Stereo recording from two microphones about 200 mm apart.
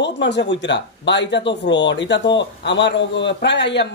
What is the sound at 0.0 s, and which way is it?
A man's voice, 60° left (ahead or behind).